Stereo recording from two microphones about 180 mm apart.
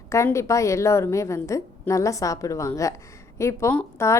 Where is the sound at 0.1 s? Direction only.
15° left (ahead or behind).